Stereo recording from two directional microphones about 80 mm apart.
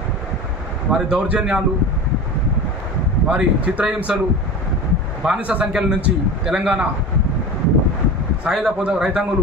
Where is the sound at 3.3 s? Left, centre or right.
Centre.